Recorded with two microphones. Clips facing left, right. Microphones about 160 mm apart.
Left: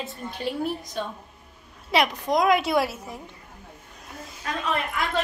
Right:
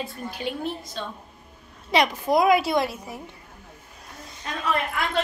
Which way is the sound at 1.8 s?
Centre (ahead or behind).